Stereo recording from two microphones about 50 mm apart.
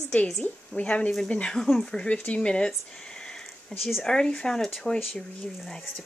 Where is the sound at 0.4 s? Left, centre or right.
Left; by 3.7 s centre.